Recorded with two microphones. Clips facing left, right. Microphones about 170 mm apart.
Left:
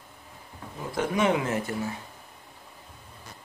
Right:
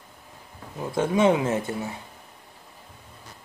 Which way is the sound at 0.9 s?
25° right (ahead or behind).